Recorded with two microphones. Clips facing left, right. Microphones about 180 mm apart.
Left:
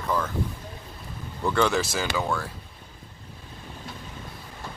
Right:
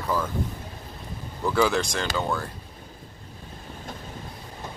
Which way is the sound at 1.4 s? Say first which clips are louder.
Right 1 dB; 5° right (ahead or behind).